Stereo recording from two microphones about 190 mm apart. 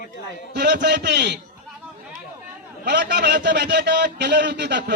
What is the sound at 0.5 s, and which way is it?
Speech, 60° right (ahead or behind).